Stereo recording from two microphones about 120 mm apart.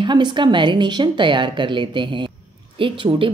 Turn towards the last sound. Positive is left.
turn(degrees=-45)  # may be behind; listen again after turning